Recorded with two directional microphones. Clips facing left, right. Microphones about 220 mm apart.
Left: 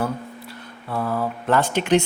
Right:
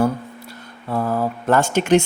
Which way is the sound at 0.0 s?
45° right (ahead or behind).